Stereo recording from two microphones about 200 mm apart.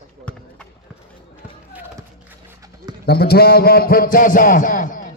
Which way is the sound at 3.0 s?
55° left (ahead or behind).